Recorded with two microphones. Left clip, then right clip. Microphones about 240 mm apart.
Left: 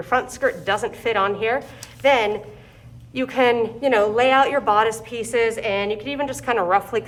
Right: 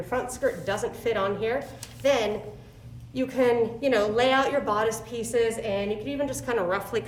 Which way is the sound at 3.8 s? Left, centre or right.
Centre.